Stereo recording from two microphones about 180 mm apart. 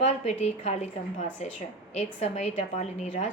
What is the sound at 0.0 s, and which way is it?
Speech, 40° left (ahead or behind).